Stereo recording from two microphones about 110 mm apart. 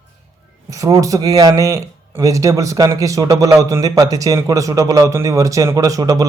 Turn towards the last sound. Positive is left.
turn(degrees=-35)  # may be behind; listen again after turning